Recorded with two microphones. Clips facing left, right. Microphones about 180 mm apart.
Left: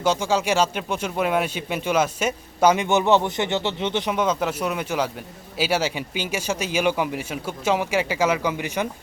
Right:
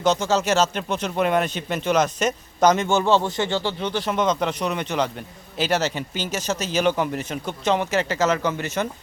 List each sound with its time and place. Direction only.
0.0 s speech: 10° left (ahead or behind)
4.1 s speech: 10° left (ahead or behind)